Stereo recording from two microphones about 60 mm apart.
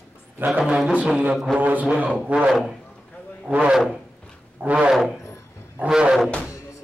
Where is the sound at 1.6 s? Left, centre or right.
Right.